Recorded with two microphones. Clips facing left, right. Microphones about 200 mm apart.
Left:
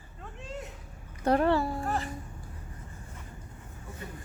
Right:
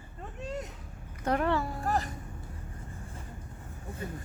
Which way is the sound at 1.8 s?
40° right (ahead or behind).